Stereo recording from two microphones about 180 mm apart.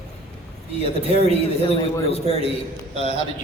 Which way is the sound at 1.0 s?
35° right (ahead or behind).